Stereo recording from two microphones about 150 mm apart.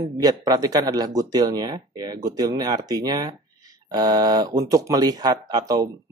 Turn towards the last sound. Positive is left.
turn(degrees=-25)  # may be behind; listen again after turning